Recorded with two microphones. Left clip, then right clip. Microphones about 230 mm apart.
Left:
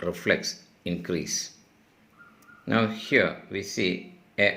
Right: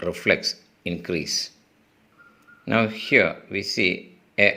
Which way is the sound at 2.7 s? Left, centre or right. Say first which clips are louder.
Right 4 dB; right.